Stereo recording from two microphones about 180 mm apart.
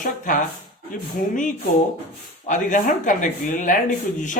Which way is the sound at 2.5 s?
45° left (ahead or behind).